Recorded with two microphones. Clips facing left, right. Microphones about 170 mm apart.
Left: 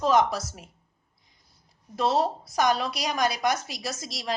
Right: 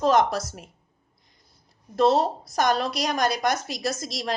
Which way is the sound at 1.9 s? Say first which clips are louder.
Right 4 dB; 10° left (ahead or behind).